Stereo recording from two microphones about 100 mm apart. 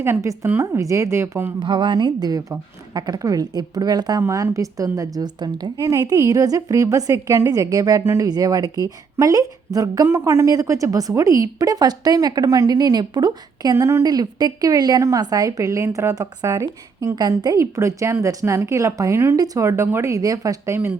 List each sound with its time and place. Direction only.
0.0 s a woman's voice: 30° right (ahead or behind)
1.5 s a woman's voice: 50° right (ahead or behind)
4.2 s a woman's voice: 30° right (ahead or behind)
8.0 s a woman's voice: 25° right (ahead or behind)
8.3 s a woman's voice: 40° right (ahead or behind)